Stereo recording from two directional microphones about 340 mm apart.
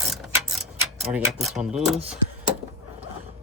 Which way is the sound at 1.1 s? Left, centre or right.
Centre.